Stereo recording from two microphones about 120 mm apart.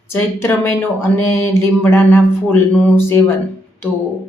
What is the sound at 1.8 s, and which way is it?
Speech, 15° left (ahead or behind).